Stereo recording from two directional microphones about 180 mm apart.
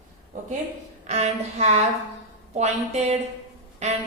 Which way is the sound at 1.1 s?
35° right (ahead or behind).